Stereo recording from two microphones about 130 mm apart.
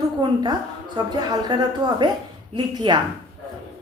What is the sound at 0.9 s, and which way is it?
A woman's voice, 35° right (ahead or behind).